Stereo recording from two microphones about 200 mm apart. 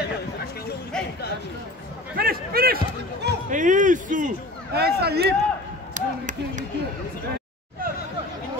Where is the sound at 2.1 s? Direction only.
50° right (ahead or behind).